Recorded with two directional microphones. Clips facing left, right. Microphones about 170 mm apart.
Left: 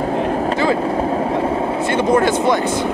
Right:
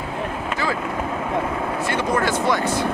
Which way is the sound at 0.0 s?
45° left (ahead or behind).